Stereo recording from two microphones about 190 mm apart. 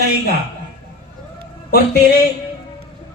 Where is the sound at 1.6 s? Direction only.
60° left (ahead or behind).